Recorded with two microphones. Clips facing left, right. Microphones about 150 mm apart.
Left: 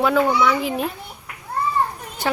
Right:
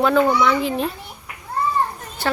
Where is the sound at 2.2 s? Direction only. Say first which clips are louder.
Even; 15° left (ahead or behind).